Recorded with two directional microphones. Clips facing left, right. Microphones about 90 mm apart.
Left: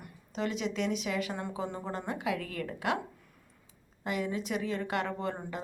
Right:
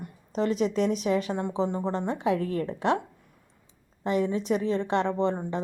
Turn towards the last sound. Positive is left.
turn(degrees=-30)  # may be behind; listen again after turning